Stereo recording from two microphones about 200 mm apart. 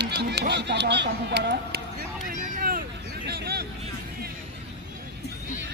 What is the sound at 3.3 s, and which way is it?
Vehicle, 50° right (ahead or behind).